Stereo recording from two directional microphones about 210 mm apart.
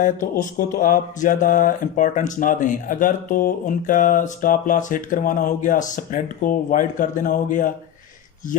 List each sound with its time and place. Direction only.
0.0 s speech: 35° left (ahead or behind)